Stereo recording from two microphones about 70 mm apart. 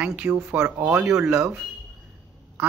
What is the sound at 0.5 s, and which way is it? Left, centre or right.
Speech, right.